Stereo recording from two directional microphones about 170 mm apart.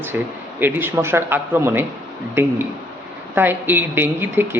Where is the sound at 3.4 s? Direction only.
10° right (ahead or behind).